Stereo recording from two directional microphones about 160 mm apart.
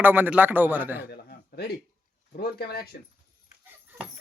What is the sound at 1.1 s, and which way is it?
Speech, 85° left.